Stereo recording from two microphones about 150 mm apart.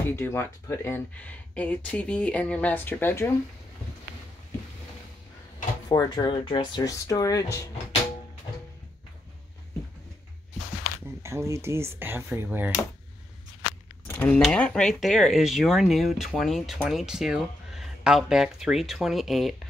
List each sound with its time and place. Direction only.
0.0 s speech: 15° left (ahead or behind)
5.9 s speech: 25° left (ahead or behind)
11.2 s speech: 20° right (ahead or behind)
14.0 s a sound: 10° left (ahead or behind)
14.4 s speech: 5° left (ahead or behind)